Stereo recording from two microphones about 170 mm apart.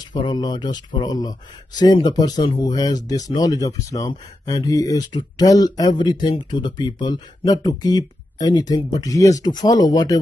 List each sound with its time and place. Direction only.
0.1 s speech: 25° left (ahead or behind)